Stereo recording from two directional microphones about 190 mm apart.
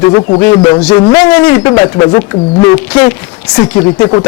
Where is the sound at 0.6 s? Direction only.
30° left (ahead or behind).